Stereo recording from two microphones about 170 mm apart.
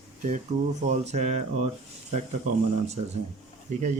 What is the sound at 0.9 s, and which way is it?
Speech, 40° right (ahead or behind).